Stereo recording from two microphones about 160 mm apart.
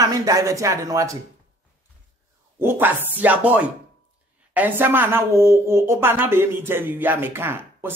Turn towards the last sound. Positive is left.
turn(degrees=-15)  # may be behind; listen again after turning